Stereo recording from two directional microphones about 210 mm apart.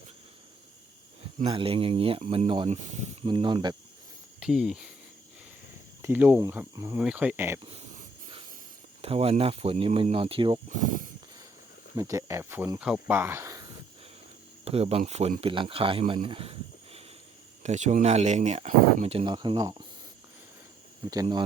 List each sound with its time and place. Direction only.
1.4 s speech: 25° right (ahead or behind)
4.4 s speech: 5° right (ahead or behind)
6.0 s speech: 10° right (ahead or behind)
7.6 s wheeze: 25° right (ahead or behind)
9.0 s speech: 30° right (ahead or behind)
10.7 s speech: 35° right (ahead or behind)
11.9 s speech: 15° right (ahead or behind)
14.6 s speech: 30° right (ahead or behind)
21.1 s speech: 20° right (ahead or behind)